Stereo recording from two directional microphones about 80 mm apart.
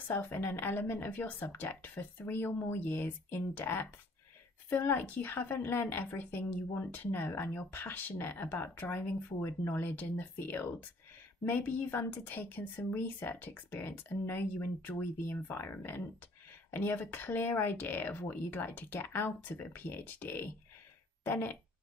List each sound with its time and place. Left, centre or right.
0.1 s a woman's voice: left